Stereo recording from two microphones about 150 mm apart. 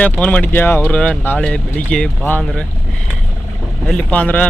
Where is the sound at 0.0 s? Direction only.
10° left (ahead or behind).